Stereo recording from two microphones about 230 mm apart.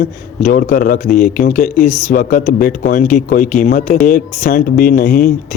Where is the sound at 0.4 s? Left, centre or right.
Left.